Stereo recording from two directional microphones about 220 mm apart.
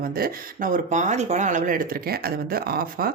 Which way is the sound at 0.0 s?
40° right (ahead or behind).